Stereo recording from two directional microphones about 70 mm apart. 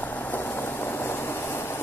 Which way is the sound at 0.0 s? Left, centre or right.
Left.